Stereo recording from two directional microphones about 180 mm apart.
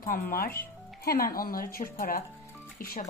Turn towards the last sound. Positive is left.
turn(degrees=55)  # may be behind; listen again after turning